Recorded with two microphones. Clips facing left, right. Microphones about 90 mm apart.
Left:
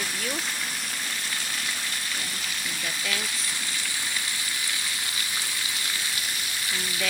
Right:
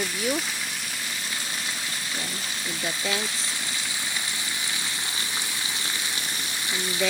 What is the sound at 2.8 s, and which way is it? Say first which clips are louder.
Speech: right 4 dB; 25° right (ahead or behind).